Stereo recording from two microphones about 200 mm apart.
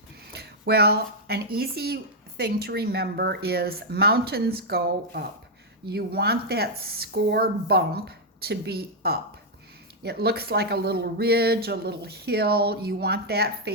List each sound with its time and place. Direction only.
0.3 s speech: 55° right (ahead or behind)